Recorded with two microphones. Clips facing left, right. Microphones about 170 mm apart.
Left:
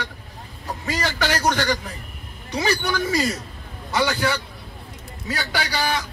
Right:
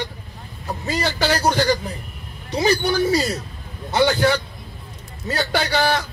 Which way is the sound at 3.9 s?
25° right (ahead or behind).